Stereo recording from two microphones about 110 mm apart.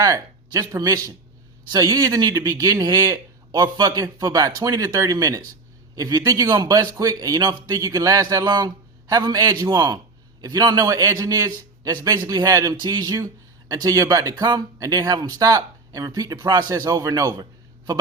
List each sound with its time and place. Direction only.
0.0 s a man's voice: 35° right (ahead or behind)